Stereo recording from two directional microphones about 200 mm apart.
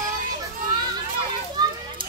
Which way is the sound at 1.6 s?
20° right (ahead or behind).